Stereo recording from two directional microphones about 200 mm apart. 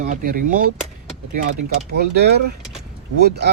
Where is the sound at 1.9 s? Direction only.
55° right (ahead or behind).